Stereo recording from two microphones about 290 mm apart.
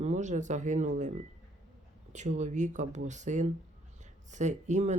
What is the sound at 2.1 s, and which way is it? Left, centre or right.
Speech, right.